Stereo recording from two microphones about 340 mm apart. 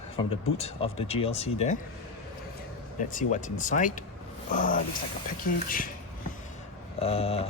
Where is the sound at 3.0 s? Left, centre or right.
Left.